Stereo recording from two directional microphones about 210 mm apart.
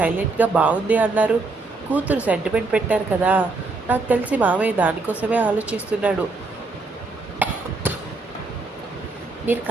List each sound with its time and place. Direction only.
0.0 s speech: 10° right (ahead or behind)
7.4 s a sound: 10° right (ahead or behind)
9.5 s speech: 10° right (ahead or behind)